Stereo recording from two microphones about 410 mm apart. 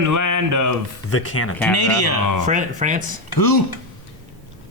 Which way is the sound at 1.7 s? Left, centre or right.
Left.